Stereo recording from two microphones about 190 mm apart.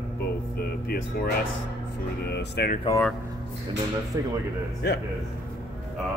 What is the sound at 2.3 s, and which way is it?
Speech, 60° left (ahead or behind).